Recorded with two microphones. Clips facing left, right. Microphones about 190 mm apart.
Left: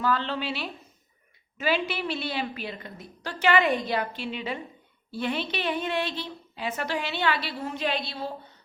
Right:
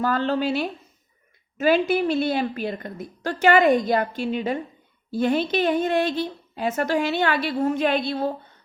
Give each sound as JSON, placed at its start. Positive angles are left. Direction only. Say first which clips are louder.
{"t": 0.0, "sound": "a woman's voice", "louder": "right 5 dB", "side_deg": -45}